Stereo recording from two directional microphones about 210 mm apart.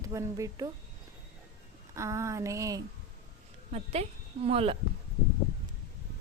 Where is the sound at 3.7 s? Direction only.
30° right (ahead or behind).